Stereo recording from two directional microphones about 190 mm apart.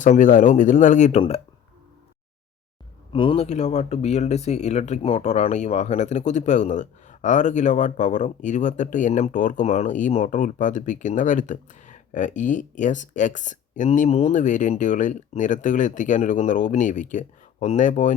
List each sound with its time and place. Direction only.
0.0 s speech: 45° left (ahead or behind)
3.1 s speech: 25° left (ahead or behind)